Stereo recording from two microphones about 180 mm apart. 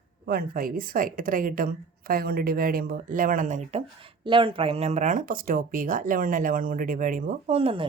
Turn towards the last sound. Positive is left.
turn(degrees=-30)  # may be behind; listen again after turning